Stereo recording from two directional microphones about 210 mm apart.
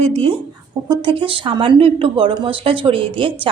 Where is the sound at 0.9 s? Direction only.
25° right (ahead or behind).